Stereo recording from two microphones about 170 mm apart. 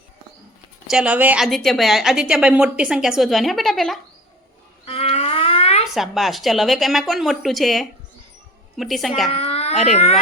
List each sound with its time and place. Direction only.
0.9 s a woman's voice: 5° right (ahead or behind)
1.5 s a woman's voice: centre (ahead or behind)
4.9 s a sound: 35° left (ahead or behind)
5.9 s a woman's voice: centre (ahead or behind)
9.3 s babbling: 35° left (ahead or behind)
9.8 s speech: 40° left (ahead or behind)